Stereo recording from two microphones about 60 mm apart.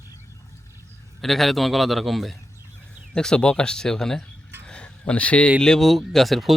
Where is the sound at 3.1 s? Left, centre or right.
Centre.